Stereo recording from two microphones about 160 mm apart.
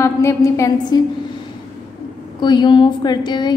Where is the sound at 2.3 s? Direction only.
30° left (ahead or behind).